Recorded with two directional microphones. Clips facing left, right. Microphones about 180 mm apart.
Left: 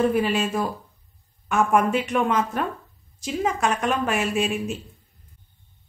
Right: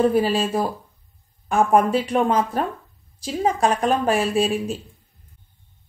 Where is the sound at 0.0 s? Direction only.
35° right (ahead or behind).